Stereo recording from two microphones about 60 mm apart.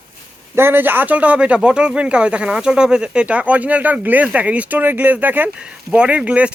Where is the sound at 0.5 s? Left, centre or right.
Right.